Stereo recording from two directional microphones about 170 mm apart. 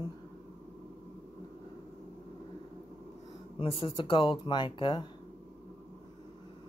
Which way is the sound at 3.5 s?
30° left (ahead or behind).